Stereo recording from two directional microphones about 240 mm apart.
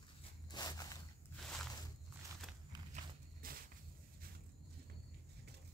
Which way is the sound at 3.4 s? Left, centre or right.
Right.